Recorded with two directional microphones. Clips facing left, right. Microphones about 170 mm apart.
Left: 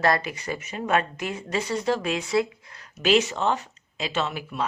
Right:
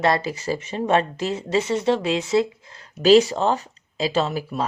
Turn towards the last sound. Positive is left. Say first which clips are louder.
# right 6 dB
turn(degrees=-40)  # may be behind; listen again after turning